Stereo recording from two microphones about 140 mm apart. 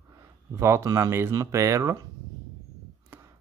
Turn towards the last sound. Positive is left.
turn(degrees=-15)  # may be behind; listen again after turning